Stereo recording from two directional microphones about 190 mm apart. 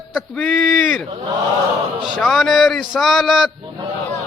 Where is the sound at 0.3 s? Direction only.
Centre (ahead or behind).